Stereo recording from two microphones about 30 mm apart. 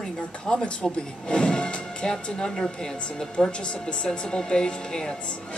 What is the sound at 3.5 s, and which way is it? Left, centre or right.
A woman's voice, left.